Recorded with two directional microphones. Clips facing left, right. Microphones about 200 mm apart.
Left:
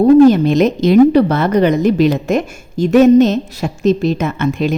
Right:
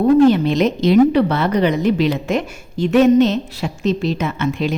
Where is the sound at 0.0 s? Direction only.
45° left (ahead or behind).